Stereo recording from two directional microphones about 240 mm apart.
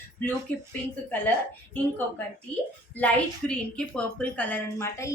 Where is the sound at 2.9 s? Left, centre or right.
Centre.